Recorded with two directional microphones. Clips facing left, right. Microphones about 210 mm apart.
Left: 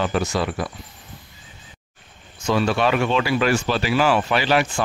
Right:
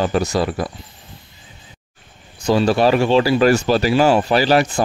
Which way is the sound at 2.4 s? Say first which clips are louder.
Right 5 dB; 35° right (ahead or behind).